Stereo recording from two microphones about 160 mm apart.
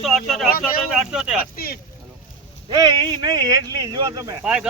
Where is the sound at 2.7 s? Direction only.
25° right (ahead or behind).